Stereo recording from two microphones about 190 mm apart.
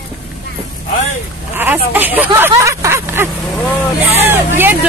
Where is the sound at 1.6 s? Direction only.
10° right (ahead or behind).